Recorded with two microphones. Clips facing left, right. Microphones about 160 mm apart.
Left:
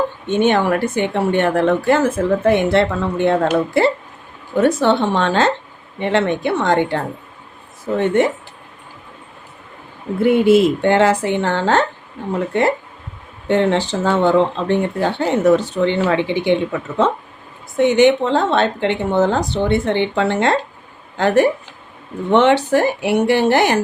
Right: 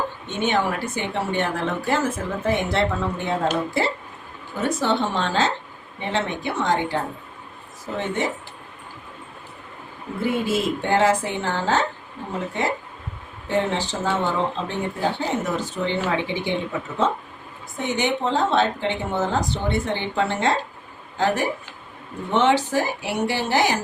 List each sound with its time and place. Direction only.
0.3 s speech: 60° left (ahead or behind)
10.2 s speech: 65° left (ahead or behind)
13.5 s speech: 65° left (ahead or behind)
17.7 s speech: 70° left (ahead or behind)